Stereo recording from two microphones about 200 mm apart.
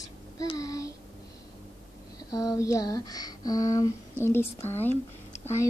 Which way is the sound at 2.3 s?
20° left (ahead or behind).